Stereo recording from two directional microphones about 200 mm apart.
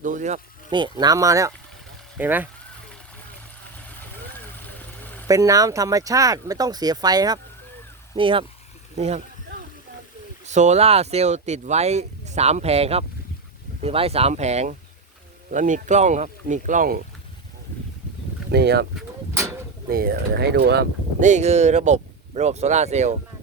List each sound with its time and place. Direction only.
0.0 s speech: 40° right (ahead or behind)
0.7 s speech: 20° right (ahead or behind)
4.4 s a sound: 10° left (ahead or behind)
5.3 s speech: 15° right (ahead or behind)
9.0 s a sound: 35° right (ahead or behind)
10.4 s speech: 35° right (ahead or behind)
18.5 s speech: 55° right (ahead or behind)
19.9 s speech: 50° right (ahead or behind)
21.2 s speech: 35° right (ahead or behind)